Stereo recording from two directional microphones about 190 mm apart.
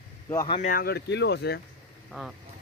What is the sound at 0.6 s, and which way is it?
Speech, 45° left (ahead or behind).